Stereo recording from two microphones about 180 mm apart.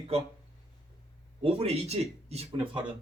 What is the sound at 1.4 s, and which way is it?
Speech, 35° right (ahead or behind).